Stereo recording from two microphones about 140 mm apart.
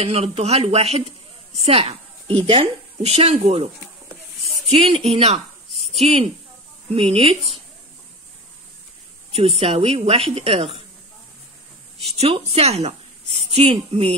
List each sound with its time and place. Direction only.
0.0 s a woman's voice: 45° right (ahead or behind)
9.3 s a woman's voice: 45° right (ahead or behind)
12.0 s a woman's voice: 50° right (ahead or behind)